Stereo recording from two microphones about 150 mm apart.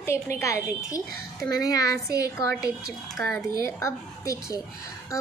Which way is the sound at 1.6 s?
25° left (ahead or behind).